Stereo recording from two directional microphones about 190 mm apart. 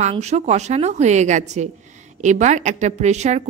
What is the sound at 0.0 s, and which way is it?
A woman's voice, 35° right (ahead or behind).